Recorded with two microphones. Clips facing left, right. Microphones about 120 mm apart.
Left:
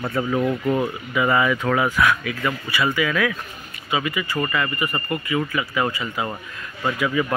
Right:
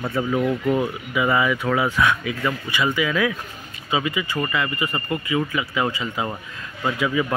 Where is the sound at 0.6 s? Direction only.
20° left (ahead or behind).